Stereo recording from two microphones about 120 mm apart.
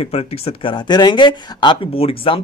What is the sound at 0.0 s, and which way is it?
Speech, 55° left (ahead or behind).